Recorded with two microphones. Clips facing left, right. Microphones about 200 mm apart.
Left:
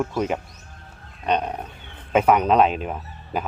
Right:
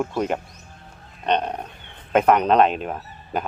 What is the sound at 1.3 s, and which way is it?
Roaring cats, 5° left (ahead or behind).